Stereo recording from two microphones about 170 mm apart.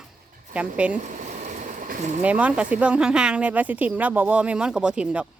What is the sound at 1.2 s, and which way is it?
Vehicle, 50° right (ahead or behind).